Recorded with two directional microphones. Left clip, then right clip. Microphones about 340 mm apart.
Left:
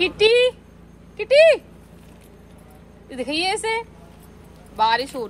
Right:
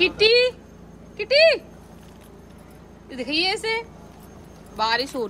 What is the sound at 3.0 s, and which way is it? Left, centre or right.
A woman's voice, centre.